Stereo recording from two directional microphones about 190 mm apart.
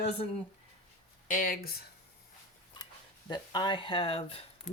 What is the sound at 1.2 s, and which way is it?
Speech, 45° left (ahead or behind).